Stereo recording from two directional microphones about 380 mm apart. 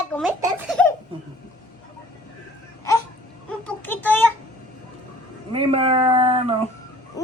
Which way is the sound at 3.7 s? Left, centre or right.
Centre.